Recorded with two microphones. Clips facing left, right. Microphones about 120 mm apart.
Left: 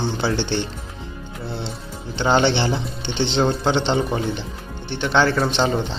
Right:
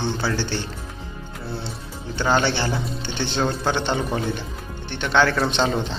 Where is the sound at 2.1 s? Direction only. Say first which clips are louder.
Left 3 dB; 20° left (ahead or behind).